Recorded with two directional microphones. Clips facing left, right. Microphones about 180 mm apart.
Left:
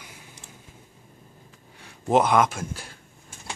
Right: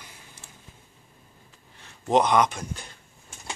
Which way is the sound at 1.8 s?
10° left (ahead or behind).